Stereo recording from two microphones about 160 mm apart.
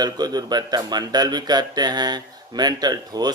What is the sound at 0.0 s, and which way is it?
Speech, 25° right (ahead or behind).